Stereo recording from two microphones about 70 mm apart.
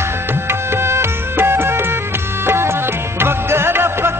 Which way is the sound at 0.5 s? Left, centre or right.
Right.